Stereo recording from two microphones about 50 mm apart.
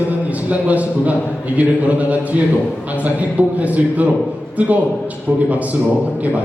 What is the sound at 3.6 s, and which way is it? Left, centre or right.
A man's voice, right.